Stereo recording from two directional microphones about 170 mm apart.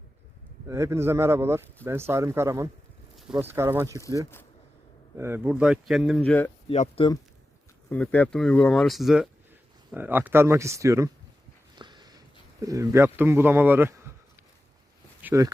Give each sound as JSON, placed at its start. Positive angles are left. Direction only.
{"t": 0.7, "sound": "speech", "side_deg": -15}
{"t": 5.1, "sound": "speech", "side_deg": -15}
{"t": 6.2, "sound": "speech", "side_deg": 10}
{"t": 6.7, "sound": "speech", "side_deg": 35}
{"t": 7.9, "sound": "speech", "side_deg": 10}
{"t": 11.8, "sound": "a sound", "side_deg": -25}
{"t": 12.6, "sound": "speech", "side_deg": -20}
{"t": 15.2, "sound": "speech", "side_deg": -15}